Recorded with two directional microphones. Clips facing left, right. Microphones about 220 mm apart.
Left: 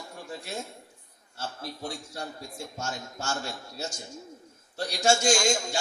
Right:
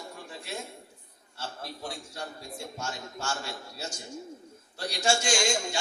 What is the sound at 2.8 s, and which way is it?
Speech, 45° left (ahead or behind).